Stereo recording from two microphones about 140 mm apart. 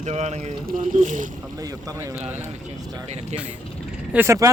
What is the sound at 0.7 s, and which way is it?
Speech, 70° right (ahead or behind).